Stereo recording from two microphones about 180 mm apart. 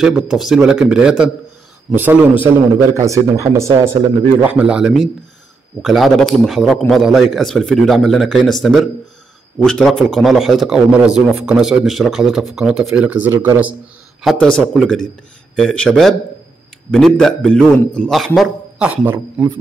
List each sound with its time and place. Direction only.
0.0 s a man's voice: centre (ahead or behind)
14.2 s a man's voice: 5° left (ahead or behind); by 19.5 s 10° right (ahead or behind)